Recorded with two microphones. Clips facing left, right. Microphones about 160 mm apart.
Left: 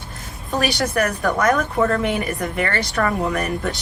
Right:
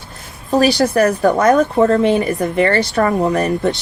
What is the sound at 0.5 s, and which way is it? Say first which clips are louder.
A woman's voice: right 8 dB; 35° right (ahead or behind).